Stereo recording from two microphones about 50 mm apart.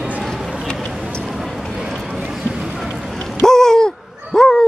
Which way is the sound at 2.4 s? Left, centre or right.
Centre.